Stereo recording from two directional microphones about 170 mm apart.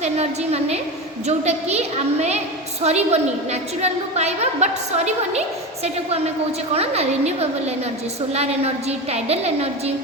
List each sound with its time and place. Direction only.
0.0 s a woman's voice: 40° right (ahead or behind)